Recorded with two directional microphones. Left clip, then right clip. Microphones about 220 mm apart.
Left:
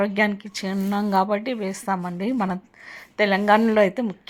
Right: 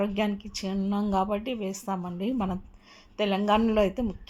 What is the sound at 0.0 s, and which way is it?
A woman's voice, 15° left (ahead or behind).